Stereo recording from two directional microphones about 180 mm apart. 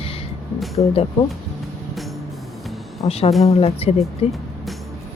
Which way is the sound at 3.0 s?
35° left (ahead or behind).